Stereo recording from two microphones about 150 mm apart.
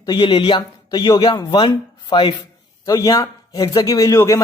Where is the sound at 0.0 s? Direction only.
30° left (ahead or behind).